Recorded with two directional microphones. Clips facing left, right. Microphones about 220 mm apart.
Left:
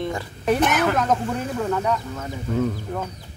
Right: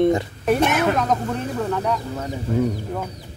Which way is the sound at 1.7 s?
5° left (ahead or behind).